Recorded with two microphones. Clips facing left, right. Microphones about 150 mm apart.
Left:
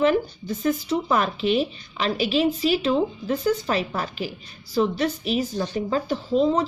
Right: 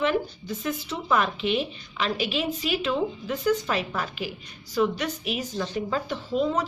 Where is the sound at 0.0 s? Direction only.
40° left (ahead or behind).